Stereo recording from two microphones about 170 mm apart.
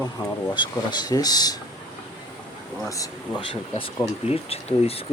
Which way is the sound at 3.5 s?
30° left (ahead or behind).